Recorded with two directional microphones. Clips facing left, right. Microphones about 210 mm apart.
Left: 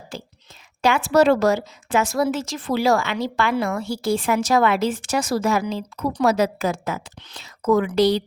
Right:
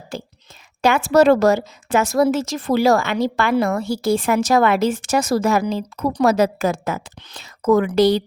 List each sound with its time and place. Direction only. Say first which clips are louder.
0.8 s a woman's voice: right 3 dB; 45° right (ahead or behind)